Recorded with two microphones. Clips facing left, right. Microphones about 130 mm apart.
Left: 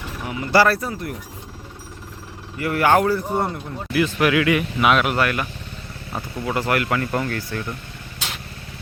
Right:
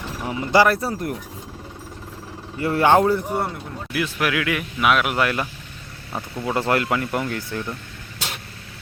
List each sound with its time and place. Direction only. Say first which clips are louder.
0.3 s speech: even; 20° right (ahead or behind)
2.6 s a man's voice: right 1 dB; 25° right (ahead or behind)
3.3 s speech: left 2 dB; centre (ahead or behind)
5.1 s a man's voice: even; 20° right (ahead or behind)